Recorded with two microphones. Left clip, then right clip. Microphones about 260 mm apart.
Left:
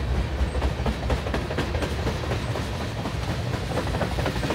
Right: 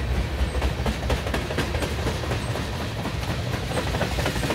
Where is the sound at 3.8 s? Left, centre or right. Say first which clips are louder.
Right 1 dB; right.